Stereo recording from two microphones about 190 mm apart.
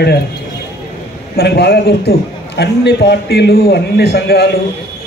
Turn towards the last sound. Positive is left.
turn(degrees=55)  # may be behind; listen again after turning